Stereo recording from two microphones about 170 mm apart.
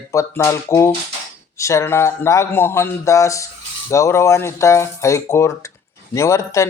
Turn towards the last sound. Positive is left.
turn(degrees=15)  # may be behind; listen again after turning